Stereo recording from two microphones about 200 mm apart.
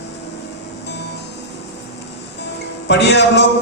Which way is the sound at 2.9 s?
60° left (ahead or behind).